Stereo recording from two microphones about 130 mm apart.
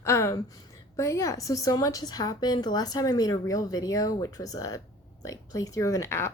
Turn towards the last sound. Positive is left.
turn(degrees=20)  # may be behind; listen again after turning